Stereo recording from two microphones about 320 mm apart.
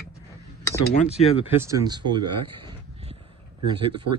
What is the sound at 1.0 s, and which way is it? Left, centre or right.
Speech, centre.